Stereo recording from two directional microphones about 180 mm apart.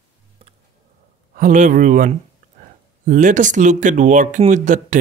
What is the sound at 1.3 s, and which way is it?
Speech, 45° right (ahead or behind).